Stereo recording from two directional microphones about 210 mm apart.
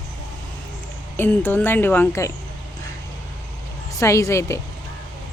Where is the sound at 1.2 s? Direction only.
10° left (ahead or behind).